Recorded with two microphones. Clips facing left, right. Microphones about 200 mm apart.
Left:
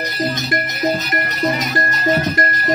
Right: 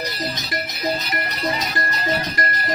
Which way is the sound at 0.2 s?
50° left (ahead or behind).